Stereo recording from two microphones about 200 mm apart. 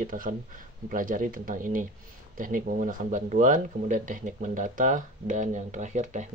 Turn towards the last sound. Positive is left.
turn(degrees=-40)  # may be behind; listen again after turning